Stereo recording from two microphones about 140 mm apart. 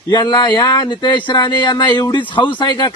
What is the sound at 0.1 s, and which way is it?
Speech, 30° left (ahead or behind).